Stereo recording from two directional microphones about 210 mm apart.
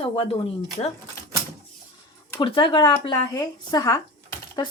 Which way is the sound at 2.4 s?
25° left (ahead or behind).